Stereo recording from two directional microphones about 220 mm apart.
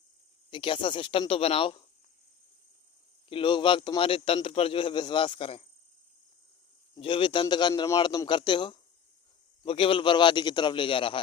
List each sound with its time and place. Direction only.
0.5 s a man's voice: 25° left (ahead or behind)
3.2 s a man's voice: 20° left (ahead or behind)
6.9 s a man's voice: 25° left (ahead or behind)